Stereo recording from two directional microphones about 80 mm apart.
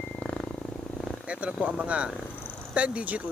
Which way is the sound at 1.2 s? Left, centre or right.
Centre.